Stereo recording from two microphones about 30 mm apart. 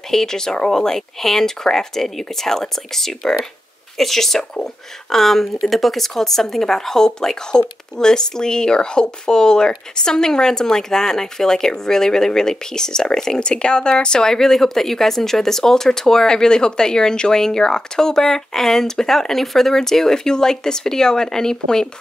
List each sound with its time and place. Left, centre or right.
0.1 s speech: centre
13.4 s speech: left
14.3 s speech: centre